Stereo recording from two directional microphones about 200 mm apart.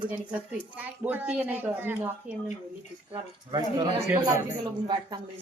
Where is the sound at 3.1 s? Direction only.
25° right (ahead or behind).